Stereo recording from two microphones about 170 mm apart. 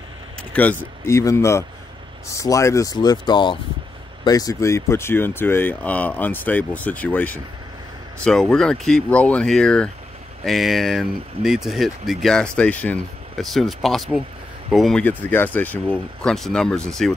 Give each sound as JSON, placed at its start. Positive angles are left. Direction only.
{"t": 0.4, "sound": "speech", "side_deg": 10}